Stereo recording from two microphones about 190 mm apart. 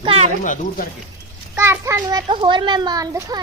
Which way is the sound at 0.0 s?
30° right (ahead or behind).